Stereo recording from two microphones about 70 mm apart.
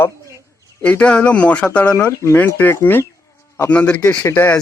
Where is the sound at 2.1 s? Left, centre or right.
Left.